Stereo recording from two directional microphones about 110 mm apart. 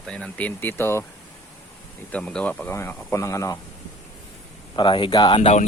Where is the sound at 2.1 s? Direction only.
10° left (ahead or behind); by 3.5 s 30° left (ahead or behind).